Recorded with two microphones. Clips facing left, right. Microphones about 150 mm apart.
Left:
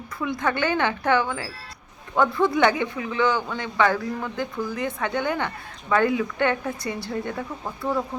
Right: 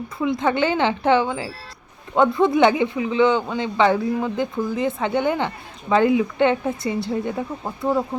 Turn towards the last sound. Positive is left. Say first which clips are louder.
# right 4 dB
turn(degrees=-20)  # may be behind; listen again after turning